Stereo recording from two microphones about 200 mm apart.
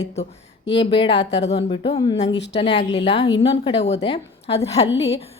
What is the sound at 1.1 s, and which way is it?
Speech, 60° left (ahead or behind).